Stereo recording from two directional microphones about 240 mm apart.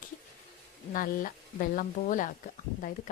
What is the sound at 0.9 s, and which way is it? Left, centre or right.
Speech, left.